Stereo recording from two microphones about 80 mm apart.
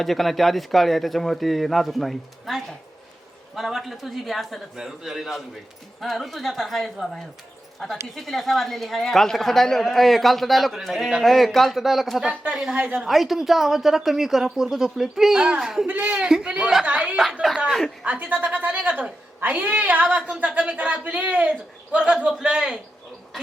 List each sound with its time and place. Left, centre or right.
0.0 s a woman's voice: centre
12.3 s a man's voice: centre
13.0 s a woman's voice: centre
15.9 s a man's voice: centre
17.7 s a woman's voice: centre
18.0 s a woman's voice: centre